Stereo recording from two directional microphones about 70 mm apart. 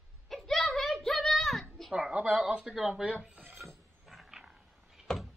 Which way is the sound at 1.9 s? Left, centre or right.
Centre.